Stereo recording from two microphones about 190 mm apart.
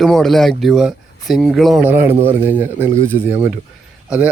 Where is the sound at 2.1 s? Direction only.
30° right (ahead or behind).